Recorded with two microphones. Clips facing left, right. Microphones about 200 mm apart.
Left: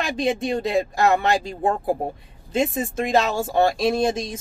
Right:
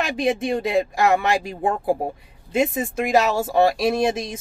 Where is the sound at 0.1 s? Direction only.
10° right (ahead or behind).